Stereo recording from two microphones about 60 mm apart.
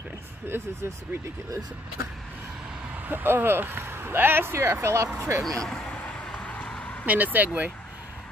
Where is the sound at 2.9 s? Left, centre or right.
Right.